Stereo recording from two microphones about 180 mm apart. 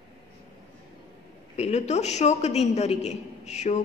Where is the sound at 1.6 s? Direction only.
40° left (ahead or behind).